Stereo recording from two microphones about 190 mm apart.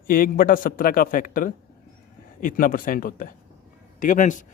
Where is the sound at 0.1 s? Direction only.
50° left (ahead or behind).